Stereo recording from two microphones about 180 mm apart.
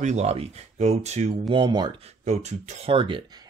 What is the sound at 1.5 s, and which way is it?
Speech, 25° right (ahead or behind).